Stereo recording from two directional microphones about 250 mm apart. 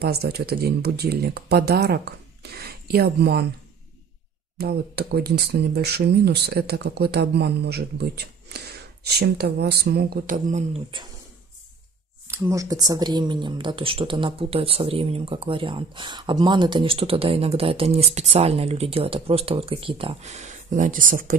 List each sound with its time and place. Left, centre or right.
0.0 s speech: right
4.6 s speech: right
12.3 s speech: centre; by 21.4 s right